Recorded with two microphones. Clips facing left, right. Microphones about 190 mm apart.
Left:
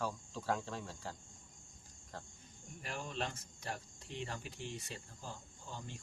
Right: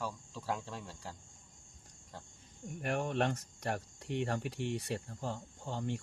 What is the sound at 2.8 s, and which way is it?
Speech, 65° right (ahead or behind).